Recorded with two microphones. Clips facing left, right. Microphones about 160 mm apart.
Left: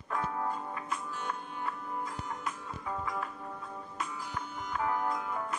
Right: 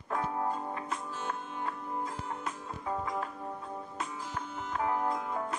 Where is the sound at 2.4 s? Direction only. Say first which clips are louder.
Right 1 dB; 25° right (ahead or behind).